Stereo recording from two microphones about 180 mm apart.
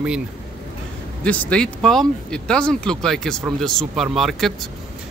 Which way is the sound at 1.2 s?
5° left (ahead or behind).